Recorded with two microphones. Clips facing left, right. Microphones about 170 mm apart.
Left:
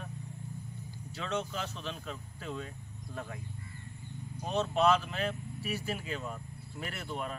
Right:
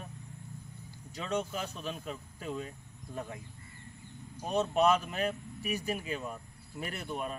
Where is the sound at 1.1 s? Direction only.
15° right (ahead or behind).